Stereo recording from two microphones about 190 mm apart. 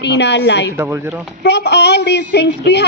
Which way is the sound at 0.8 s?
10° right (ahead or behind).